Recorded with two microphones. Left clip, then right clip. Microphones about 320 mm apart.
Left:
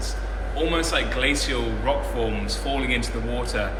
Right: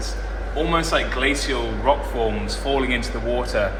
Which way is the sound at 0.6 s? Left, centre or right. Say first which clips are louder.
Right 2 dB; right.